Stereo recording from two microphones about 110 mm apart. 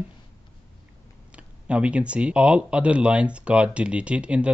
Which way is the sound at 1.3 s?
10° right (ahead or behind).